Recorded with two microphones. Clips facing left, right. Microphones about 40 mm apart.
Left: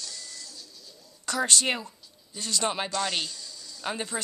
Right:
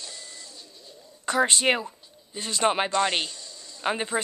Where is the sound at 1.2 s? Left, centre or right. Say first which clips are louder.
Right 4 dB; right.